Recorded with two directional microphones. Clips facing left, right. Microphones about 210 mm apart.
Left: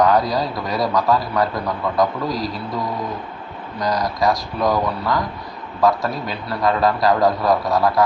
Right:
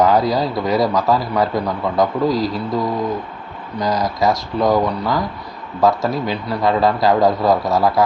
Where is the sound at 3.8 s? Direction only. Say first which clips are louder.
Right 2 dB; 25° right (ahead or behind).